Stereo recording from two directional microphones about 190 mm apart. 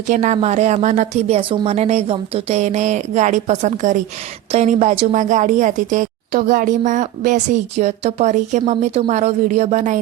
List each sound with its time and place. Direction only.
0.1 s a woman's voice: 40° right (ahead or behind)